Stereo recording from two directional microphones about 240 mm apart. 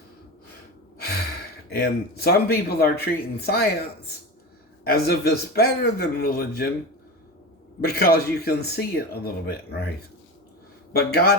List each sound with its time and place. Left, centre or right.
0.9 s sigh: left
1.8 s speech: left
4.8 s speech: left
7.8 s speech: left
10.9 s speech: left